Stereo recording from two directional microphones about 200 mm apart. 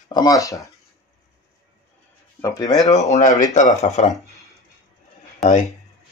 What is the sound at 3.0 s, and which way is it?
Speech, 35° left (ahead or behind).